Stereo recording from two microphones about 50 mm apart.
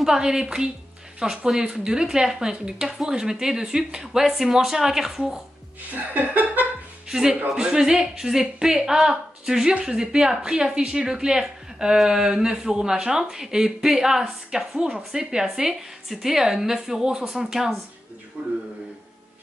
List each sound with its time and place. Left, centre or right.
0.0 s speech: centre
5.9 s chuckle: right
7.1 s speech: centre